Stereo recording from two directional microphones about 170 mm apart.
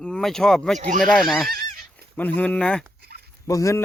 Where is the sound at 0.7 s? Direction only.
45° right (ahead or behind).